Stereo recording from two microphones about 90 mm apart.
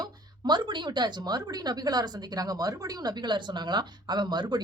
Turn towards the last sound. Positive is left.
turn(degrees=-55)  # may be behind; listen again after turning